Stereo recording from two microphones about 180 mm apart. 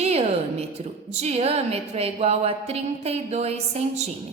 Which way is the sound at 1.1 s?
35° right (ahead or behind).